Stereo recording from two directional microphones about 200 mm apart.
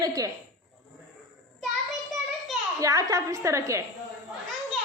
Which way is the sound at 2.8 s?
15° right (ahead or behind).